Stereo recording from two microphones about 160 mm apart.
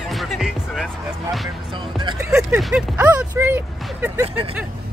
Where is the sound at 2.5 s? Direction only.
5° right (ahead or behind).